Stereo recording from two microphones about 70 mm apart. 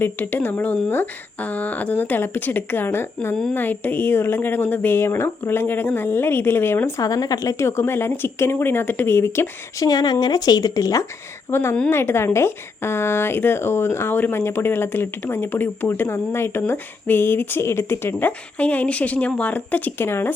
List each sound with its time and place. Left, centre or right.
0.0 s speech: left
7.0 s speech: left
7.6 s speech: left
9.7 s speech: left
11.5 s speech: left
18.1 s speech: left